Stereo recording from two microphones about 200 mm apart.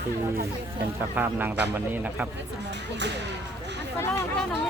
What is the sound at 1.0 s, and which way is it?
A man's voice, 10° right (ahead or behind).